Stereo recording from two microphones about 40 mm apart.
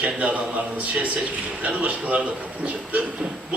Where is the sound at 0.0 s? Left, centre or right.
Right.